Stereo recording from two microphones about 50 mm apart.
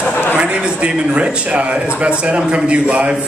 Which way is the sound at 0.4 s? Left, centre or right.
Right.